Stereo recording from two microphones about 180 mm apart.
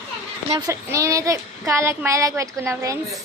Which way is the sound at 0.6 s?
15° right (ahead or behind).